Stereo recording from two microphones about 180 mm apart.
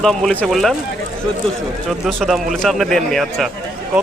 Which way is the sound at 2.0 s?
Centre (ahead or behind).